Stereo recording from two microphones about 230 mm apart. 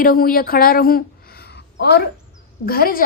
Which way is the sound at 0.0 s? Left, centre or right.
Left.